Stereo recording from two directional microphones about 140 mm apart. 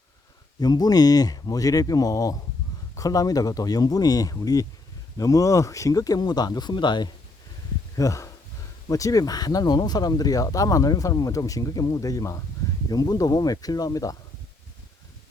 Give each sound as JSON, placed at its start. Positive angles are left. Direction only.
{"t": 0.6, "sound": "speech", "side_deg": 30}